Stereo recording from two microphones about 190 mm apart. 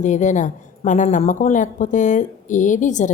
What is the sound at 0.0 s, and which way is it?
A woman's voice, 40° left (ahead or behind).